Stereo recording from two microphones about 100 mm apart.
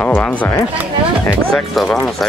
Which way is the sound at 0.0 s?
15° left (ahead or behind).